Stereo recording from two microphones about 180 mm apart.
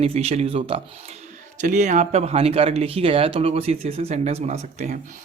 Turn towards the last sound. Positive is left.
turn(degrees=-40)  # may be behind; listen again after turning